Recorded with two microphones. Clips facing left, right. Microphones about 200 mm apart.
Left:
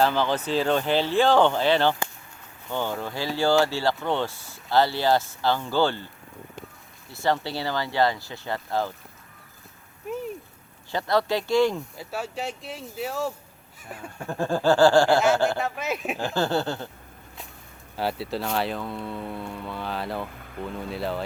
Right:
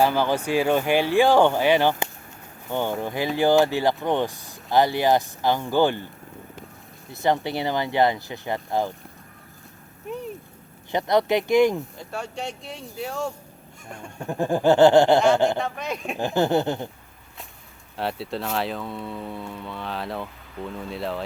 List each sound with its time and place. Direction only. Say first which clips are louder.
0.0 s speech: right 2 dB; 10° right (ahead or behind)
7.1 s speech: right 3 dB; 20° right (ahead or behind)
10.9 s speech: right 3 dB; 20° right (ahead or behind)
11.9 s speech: even; 5° left (ahead or behind)
14.3 s speech: right 3 dB; 15° right (ahead or behind)
15.5 s speech: even; 5° left (ahead or behind)
16.1 s speech: right 6 dB; 20° right (ahead or behind)
17.9 s speech: even; centre (ahead or behind)